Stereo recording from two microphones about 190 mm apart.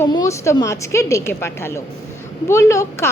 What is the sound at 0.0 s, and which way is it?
A woman's voice, 15° left (ahead or behind).